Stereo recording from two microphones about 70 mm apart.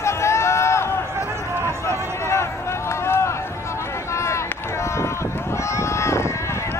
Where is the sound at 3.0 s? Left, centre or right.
Left.